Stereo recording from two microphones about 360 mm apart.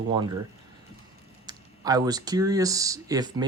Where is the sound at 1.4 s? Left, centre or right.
Centre.